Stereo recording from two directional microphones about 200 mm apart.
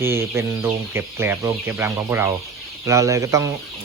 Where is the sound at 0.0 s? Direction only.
10° right (ahead or behind).